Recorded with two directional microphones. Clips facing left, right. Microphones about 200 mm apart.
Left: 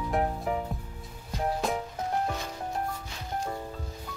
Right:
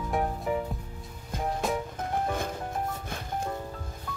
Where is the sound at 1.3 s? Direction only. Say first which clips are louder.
Even; 50° right (ahead or behind).